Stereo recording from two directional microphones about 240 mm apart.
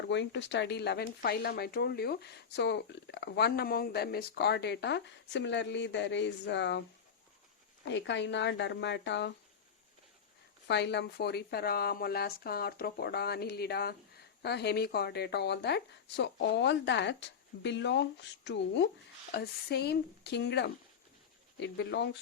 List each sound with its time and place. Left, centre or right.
0.1 s speech: left
7.9 s speech: left
10.7 s a woman's voice: left